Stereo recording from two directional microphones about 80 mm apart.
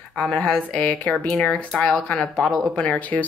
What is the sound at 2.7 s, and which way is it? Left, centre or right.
Speech, centre.